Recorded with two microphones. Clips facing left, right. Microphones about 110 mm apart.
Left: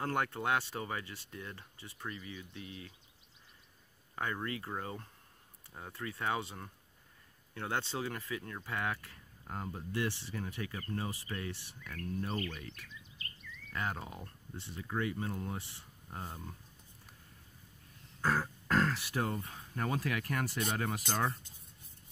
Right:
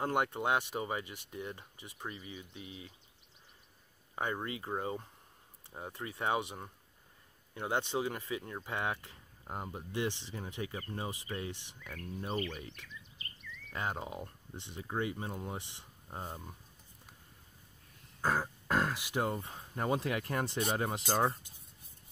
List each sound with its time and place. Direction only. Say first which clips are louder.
0.0 s speech: right 2 dB; 20° right (ahead or behind)
4.1 s speech: right 1 dB; 20° right (ahead or behind)
18.2 s speech: even; 15° right (ahead or behind)